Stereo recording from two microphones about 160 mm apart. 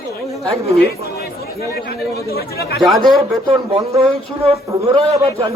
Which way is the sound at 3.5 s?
35° right (ahead or behind).